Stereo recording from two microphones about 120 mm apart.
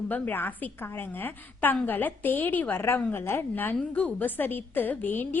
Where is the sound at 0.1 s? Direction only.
15° left (ahead or behind).